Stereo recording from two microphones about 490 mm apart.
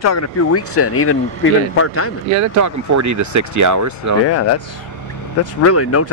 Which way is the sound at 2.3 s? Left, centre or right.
Right.